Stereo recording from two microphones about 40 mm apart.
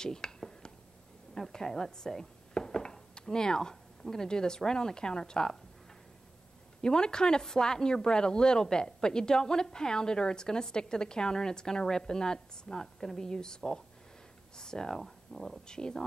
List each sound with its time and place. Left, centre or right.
0.0 s a sound: centre
4.0 s speech: centre
6.8 s speech: centre
15.6 s speech: centre